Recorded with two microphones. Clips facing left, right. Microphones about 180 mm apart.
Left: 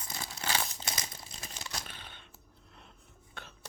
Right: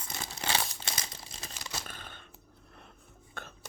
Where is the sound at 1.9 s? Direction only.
45° right (ahead or behind).